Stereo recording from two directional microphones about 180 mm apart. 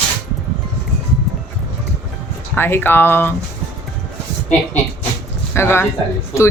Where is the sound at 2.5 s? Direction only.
10° left (ahead or behind).